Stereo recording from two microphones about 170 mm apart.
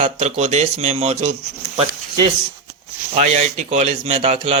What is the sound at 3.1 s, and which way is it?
Speech, 40° right (ahead or behind).